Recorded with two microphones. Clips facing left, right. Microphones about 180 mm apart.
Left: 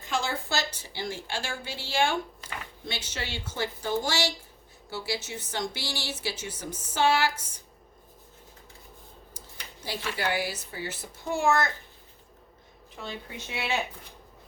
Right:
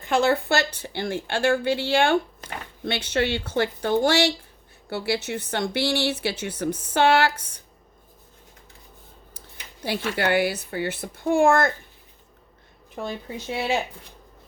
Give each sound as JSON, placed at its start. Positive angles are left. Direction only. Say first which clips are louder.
{"t": 0.0, "sound": "a woman's voice", "louder": "right 10 dB", "side_deg": -60}
{"t": 9.8, "sound": "a woman's voice", "louder": "right 7 dB", "side_deg": -65}
{"t": 13.0, "sound": "speech", "louder": "right 7 dB", "side_deg": -40}